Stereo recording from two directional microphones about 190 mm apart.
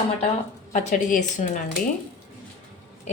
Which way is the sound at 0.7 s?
45° left (ahead or behind).